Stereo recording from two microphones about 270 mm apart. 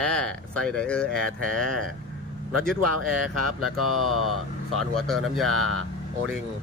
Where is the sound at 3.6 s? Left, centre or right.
Right.